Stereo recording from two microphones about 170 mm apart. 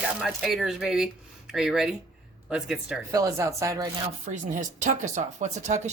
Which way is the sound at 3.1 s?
20° right (ahead or behind).